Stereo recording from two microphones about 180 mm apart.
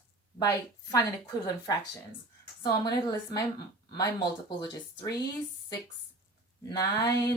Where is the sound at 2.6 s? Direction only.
25° left (ahead or behind).